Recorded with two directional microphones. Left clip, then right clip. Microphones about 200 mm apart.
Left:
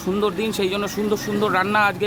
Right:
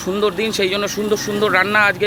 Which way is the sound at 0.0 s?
10° left (ahead or behind).